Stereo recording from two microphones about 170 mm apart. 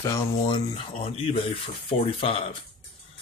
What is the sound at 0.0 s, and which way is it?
Speech, 20° left (ahead or behind).